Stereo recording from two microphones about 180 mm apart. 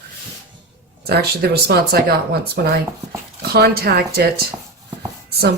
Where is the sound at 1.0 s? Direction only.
60° right (ahead or behind).